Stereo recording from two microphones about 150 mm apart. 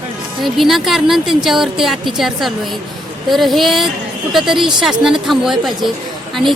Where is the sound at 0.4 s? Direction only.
Centre (ahead or behind).